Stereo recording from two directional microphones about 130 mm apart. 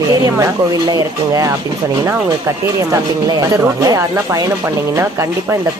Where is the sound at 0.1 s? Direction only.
30° right (ahead or behind).